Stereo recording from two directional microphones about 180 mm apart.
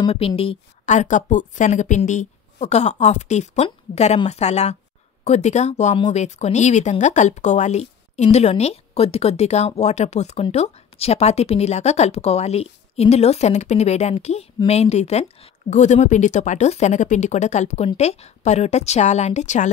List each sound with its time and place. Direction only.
0.0 s speech: 30° left (ahead or behind)